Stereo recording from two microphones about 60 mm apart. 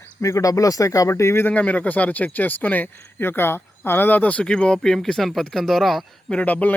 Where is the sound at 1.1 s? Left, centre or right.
Left.